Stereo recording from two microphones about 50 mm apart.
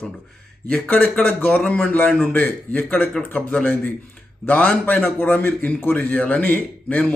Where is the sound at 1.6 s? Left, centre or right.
Left.